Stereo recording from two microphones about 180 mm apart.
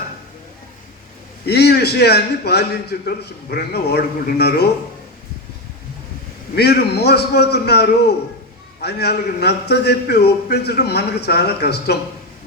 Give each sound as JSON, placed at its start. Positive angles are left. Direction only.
{"t": 1.5, "sound": "a man's voice", "side_deg": 65}
{"t": 6.6, "sound": "a man's voice", "side_deg": 65}